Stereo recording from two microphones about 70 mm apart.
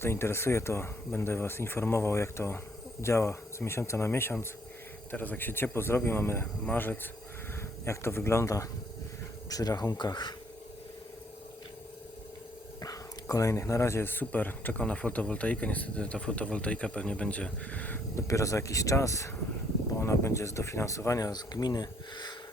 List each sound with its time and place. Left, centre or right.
0.0 s speech: left
7.9 s speech: left
9.5 s speech: left
12.8 s dog: left
13.6 s speech: left
18.1 s speech: left